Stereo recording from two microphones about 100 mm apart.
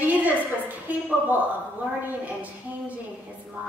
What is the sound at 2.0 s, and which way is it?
Speech, 15° right (ahead or behind).